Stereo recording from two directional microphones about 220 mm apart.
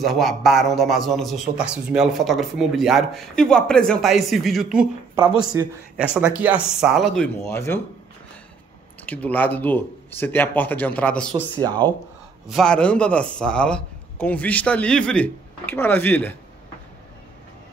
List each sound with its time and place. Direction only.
0.0 s a man's voice: centre (ahead or behind)
5.5 s a man's voice: 15° right (ahead or behind); by 7.8 s 10° left (ahead or behind)
9.0 s speech: 5° left (ahead or behind)
11.8 s speech: 20° right (ahead or behind)
12.4 s a man's voice: centre (ahead or behind)